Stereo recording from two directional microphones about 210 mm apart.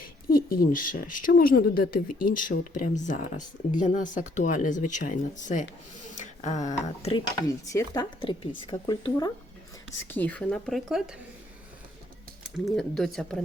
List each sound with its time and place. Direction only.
0.0 s speech: 45° left (ahead or behind)
7.4 s speech: 15° left (ahead or behind)
10.1 s speech: 10° left (ahead or behind)
12.4 s speech: centre (ahead or behind)